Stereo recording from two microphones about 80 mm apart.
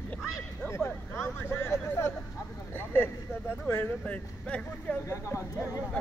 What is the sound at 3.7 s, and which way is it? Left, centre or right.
Speech, centre.